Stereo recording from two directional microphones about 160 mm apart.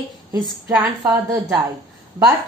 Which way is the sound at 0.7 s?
15° right (ahead or behind).